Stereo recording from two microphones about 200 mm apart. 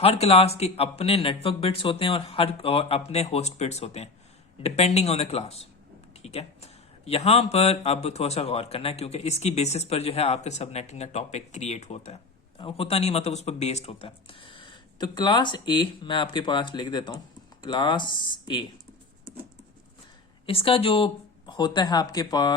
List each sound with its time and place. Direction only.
0.0 s speech: 30° left (ahead or behind)
20.5 s speech: 25° left (ahead or behind)